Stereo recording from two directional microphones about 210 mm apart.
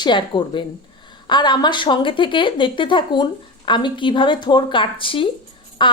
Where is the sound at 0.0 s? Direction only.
20° left (ahead or behind).